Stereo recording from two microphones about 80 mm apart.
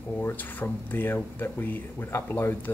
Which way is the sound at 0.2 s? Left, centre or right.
Left.